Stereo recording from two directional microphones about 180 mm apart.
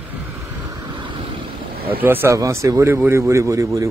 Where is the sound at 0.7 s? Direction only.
25° right (ahead or behind).